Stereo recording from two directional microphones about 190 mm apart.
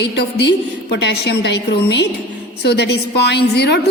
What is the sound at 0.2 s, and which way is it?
A woman's voice, 60° left (ahead or behind).